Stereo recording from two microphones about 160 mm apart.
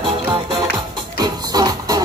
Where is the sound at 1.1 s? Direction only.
25° right (ahead or behind).